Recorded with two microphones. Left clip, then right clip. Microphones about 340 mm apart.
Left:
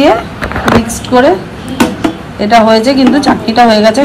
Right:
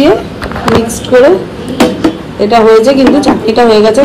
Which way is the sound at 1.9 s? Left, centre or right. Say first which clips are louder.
Right 3 dB; centre.